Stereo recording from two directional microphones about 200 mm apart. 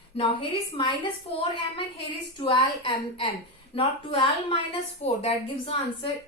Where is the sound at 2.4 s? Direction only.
25° left (ahead or behind).